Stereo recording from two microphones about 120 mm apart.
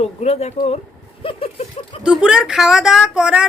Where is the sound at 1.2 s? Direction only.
50° left (ahead or behind).